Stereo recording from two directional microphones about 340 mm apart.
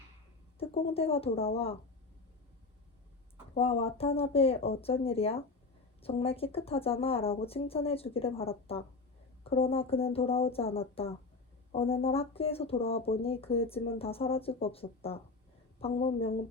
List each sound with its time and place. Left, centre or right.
0.6 s speech: centre
3.5 s speech: centre